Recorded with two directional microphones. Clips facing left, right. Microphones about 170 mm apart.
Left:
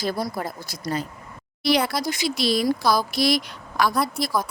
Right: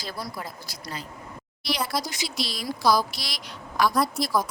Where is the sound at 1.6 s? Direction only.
60° left (ahead or behind).